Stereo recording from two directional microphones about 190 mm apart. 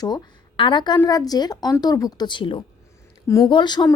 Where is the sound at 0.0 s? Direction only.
25° left (ahead or behind).